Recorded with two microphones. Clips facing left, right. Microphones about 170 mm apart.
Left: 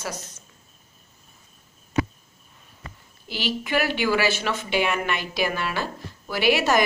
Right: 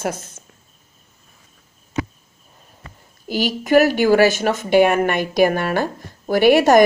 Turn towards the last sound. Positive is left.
turn(degrees=-50)  # may be behind; listen again after turning